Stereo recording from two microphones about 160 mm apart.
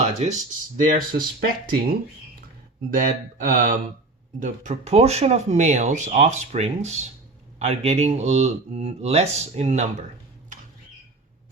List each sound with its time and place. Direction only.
0.0 s a sound: 45° right (ahead or behind)
0.8 s speech: 55° right (ahead or behind)
2.9 s speech: 55° right (ahead or behind)